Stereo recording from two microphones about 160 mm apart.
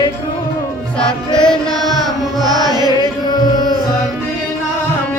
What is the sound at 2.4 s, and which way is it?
Music, 25° right (ahead or behind).